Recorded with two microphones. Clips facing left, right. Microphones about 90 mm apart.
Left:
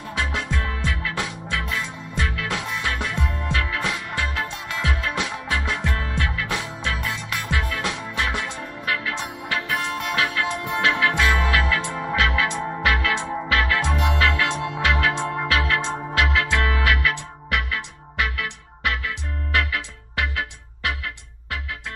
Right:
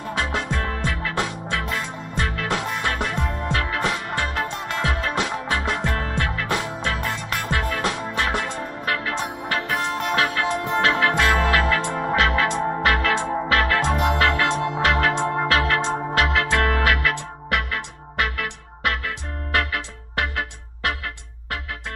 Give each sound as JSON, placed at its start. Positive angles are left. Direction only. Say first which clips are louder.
{"t": 0.1, "sound": "music", "louder": "right 1 dB", "side_deg": -35}